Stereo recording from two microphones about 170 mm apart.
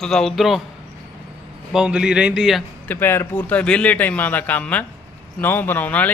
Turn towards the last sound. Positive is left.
turn(degrees=10)  # may be behind; listen again after turning